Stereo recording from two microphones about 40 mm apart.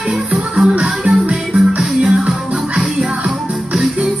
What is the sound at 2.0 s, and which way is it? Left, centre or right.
Music, centre.